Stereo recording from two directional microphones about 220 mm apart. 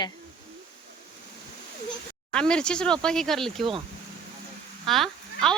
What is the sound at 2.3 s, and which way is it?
Speech, 5° left (ahead or behind).